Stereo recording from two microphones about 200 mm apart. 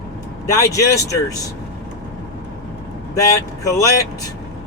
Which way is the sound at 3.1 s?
15° left (ahead or behind).